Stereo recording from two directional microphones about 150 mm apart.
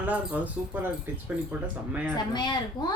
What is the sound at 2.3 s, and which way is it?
Speech, 30° left (ahead or behind).